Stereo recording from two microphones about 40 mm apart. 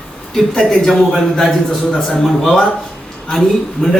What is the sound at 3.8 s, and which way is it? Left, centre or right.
Speech, centre.